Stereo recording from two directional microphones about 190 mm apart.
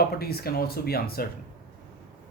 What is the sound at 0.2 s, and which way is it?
Speech, 55° left (ahead or behind).